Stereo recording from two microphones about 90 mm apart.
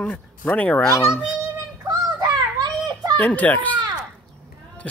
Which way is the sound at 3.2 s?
15° left (ahead or behind).